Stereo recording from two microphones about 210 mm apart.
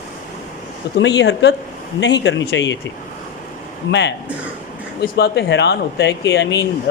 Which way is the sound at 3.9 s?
55° left (ahead or behind).